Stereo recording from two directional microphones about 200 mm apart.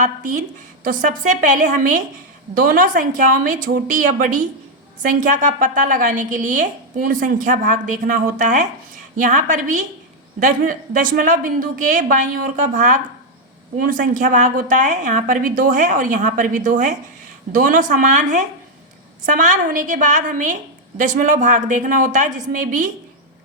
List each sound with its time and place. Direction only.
0.0 s a woman's voice: 40° right (ahead or behind)